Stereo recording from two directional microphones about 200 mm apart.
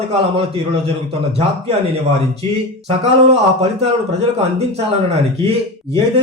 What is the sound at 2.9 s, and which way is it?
A man's voice, 30° right (ahead or behind).